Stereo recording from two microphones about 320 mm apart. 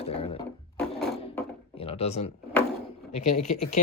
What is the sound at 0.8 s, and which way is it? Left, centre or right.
Wood, centre.